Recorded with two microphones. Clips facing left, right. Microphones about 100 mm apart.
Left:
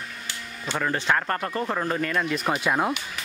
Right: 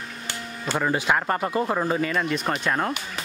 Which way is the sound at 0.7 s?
10° right (ahead or behind).